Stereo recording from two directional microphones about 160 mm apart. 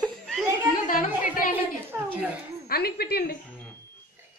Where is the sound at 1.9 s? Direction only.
10° right (ahead or behind).